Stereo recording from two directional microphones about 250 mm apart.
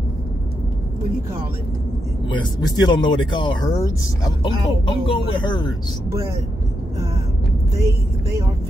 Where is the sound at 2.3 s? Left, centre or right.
Centre.